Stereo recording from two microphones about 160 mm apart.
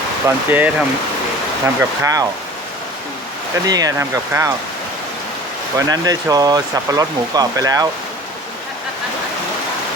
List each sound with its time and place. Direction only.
0.3 s speech: 10° right (ahead or behind)
3.7 s speech: 20° right (ahead or behind)
5.7 s speech: 20° right (ahead or behind)